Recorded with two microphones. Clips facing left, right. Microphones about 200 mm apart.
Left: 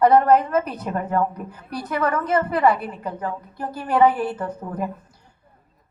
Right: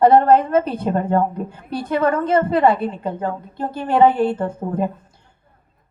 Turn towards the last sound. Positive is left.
turn(degrees=-25)  # may be behind; listen again after turning